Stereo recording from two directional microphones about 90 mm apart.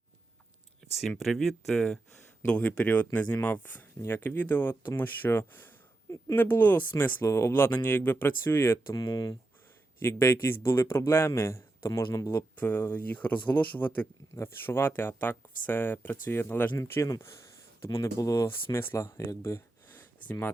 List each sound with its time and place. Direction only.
0.8 s a sound: centre (ahead or behind)
1.2 s speech: 5° left (ahead or behind); by 6.9 s 20° left (ahead or behind)
7.2 s speech: 30° left (ahead or behind)
8.9 s speech: 50° left (ahead or behind)
10.0 s speech: 30° left (ahead or behind)
12.3 s speech: 25° left (ahead or behind)
19.4 s a sound: 30° left (ahead or behind)